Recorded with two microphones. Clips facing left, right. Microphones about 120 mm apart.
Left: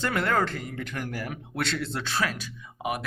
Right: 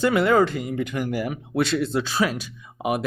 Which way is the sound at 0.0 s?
10° right (ahead or behind).